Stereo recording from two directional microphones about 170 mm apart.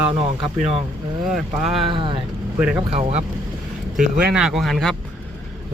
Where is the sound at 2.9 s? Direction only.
40° right (ahead or behind).